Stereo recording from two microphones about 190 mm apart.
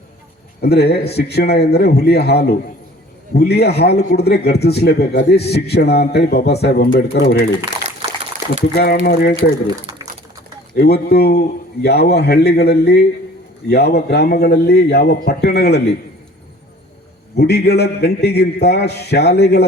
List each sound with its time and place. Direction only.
0.6 s a man's voice: 60° left (ahead or behind)
8.0 s a sound: 30° right (ahead or behind)
8.7 s a man's voice: 60° left (ahead or behind)
10.8 s a man's voice: 55° left (ahead or behind)
17.3 s a man's voice: 60° left (ahead or behind)